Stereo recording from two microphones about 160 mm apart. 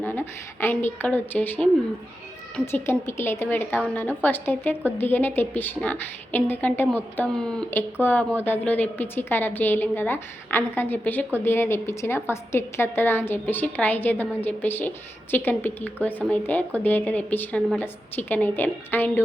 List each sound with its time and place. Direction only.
0.0 s a woman's voice: 10° left (ahead or behind)
2.7 s a woman's voice: 15° left (ahead or behind)